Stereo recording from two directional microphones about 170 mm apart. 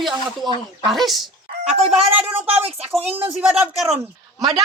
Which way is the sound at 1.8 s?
35° right (ahead or behind).